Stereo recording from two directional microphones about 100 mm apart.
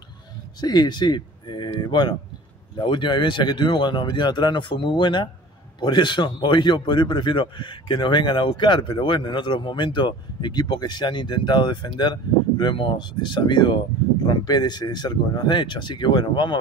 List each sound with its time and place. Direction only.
0.6 s a man's voice: 45° left (ahead or behind)